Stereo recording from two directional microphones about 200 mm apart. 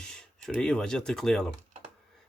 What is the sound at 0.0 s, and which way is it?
A man's voice, 5° left (ahead or behind).